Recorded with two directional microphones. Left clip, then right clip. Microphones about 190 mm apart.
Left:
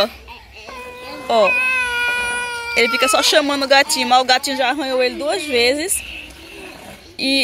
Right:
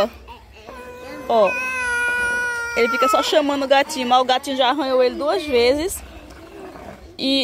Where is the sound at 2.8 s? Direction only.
5° right (ahead or behind).